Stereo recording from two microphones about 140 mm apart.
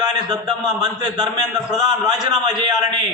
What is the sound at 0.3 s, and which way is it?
A man's voice, 30° right (ahead or behind).